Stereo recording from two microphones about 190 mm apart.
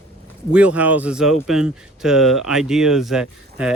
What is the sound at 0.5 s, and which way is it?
A man's voice, 5° right (ahead or behind).